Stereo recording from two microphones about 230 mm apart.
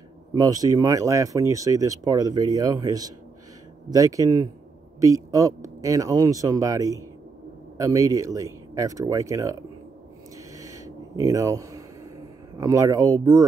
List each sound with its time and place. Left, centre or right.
0.3 s speech: centre
10.6 s a sound: centre
12.5 s speech: centre